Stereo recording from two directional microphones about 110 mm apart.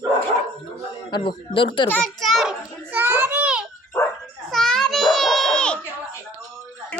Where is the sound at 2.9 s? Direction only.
15° right (ahead or behind).